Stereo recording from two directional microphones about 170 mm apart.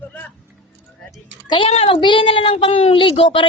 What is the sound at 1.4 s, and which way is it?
A child's voice, 30° left (ahead or behind).